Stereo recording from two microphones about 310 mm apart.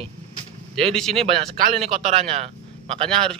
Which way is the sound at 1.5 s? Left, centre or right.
Right.